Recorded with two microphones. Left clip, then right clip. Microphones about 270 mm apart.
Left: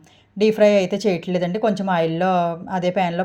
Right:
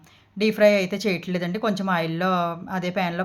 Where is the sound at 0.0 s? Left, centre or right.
Centre.